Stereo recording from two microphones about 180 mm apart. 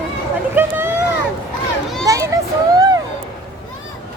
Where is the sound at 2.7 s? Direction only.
20° right (ahead or behind).